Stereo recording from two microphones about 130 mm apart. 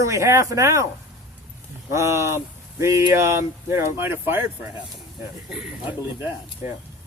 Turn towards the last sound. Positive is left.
turn(degrees=-15)  # may be behind; listen again after turning